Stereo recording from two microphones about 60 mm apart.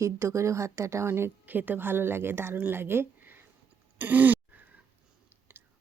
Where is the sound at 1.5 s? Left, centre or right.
Right.